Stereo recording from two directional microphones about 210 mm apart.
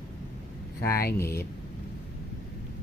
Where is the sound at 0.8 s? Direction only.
45° left (ahead or behind).